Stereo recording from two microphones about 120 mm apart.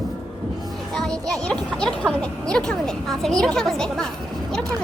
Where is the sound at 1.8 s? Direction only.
5° left (ahead or behind).